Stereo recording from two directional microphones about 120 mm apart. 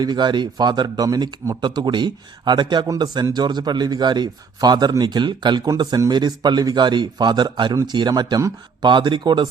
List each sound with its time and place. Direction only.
0.0 s speech: 35° right (ahead or behind)